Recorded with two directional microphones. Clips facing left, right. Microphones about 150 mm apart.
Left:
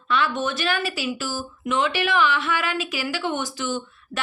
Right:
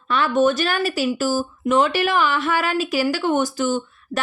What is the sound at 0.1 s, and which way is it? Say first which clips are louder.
Speech: right 6 dB; 45° right (ahead or behind).